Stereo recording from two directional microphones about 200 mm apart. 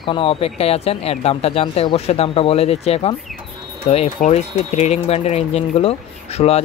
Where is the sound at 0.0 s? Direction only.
25° left (ahead or behind).